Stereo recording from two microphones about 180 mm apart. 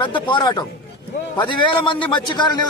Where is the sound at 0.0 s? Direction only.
25° left (ahead or behind).